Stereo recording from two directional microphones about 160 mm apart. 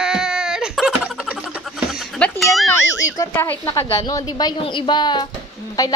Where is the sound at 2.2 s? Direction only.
Centre (ahead or behind).